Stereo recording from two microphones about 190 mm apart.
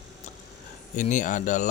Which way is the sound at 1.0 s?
40° left (ahead or behind).